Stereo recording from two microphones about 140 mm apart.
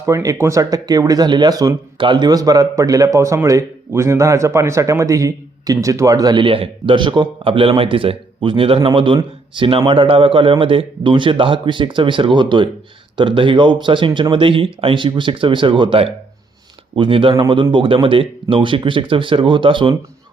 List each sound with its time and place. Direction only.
0.0 s speech: 20° right (ahead or behind)